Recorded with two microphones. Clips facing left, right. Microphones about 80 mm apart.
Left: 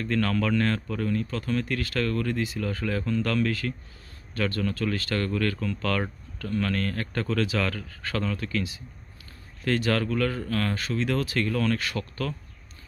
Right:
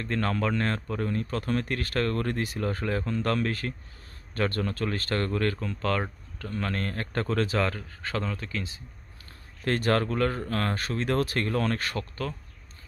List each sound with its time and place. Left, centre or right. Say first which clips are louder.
0.0 s speech: left 2 dB; right
1.2 s speech: even; right
2.6 s speech: even; right
9.7 s speech: even; right